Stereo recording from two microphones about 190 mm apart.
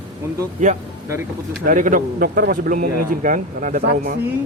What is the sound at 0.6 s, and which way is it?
Speech, 40° right (ahead or behind).